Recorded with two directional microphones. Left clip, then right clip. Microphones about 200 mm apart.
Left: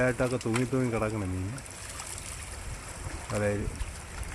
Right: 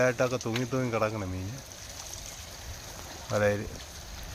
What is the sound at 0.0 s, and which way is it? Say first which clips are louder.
Speech: right 2 dB; 5° right (ahead or behind).